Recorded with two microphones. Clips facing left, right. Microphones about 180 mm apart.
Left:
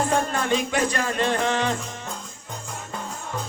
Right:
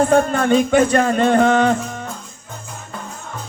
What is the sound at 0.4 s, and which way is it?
Music, 45° right (ahead or behind).